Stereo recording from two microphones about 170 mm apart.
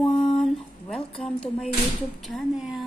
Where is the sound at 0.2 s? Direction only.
Centre (ahead or behind).